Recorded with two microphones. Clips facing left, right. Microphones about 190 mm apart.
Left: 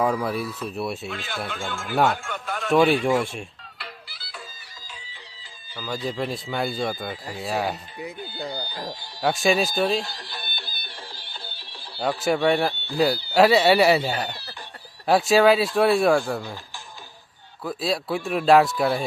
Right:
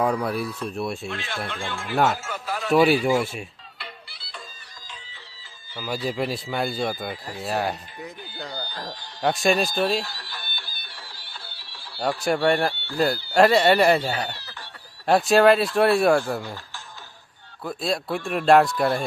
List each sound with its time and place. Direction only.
0.0 s speech: centre (ahead or behind)
5.7 s a man's voice: 10° right (ahead or behind)
10.0 s music: 15° left (ahead or behind)
11.9 s a man's voice: centre (ahead or behind)
15.0 s a man's voice: centre (ahead or behind)
16.4 s a man's voice: 10° left (ahead or behind)